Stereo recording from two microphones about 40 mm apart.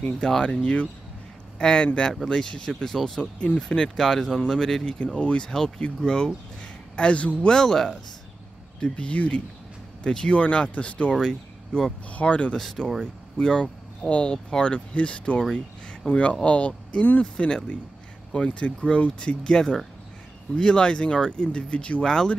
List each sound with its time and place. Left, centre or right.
0.2 s speech: centre
2.7 s speech: centre
3.2 s speech: left
3.5 s speech: centre
4.8 s speech: left
7.0 s speech: left
7.4 s speech: centre
8.8 s speech: left
11.1 s speech: centre
12.1 s speech: left
12.5 s speech: centre
13.0 s speech: centre
22.0 s speech: centre